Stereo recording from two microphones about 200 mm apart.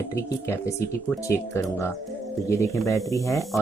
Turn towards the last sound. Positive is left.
turn(degrees=15)  # may be behind; listen again after turning